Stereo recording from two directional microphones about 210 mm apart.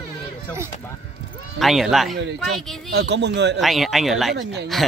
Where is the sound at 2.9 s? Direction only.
55° right (ahead or behind).